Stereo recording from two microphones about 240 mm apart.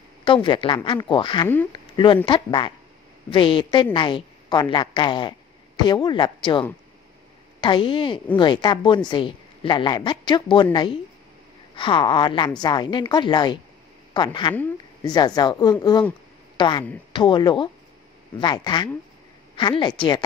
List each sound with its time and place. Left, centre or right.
0.2 s a woman's voice: centre
1.7 s a sound: centre
2.2 s a woman's voice: centre
7.6 s a woman's voice: centre